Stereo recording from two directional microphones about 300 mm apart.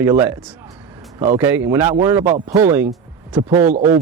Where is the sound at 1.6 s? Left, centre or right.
Centre.